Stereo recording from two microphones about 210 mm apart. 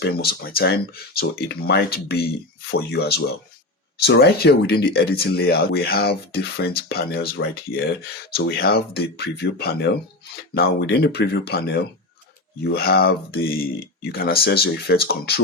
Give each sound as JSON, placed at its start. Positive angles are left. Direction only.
{"t": 0.0, "sound": "speech", "side_deg": 45}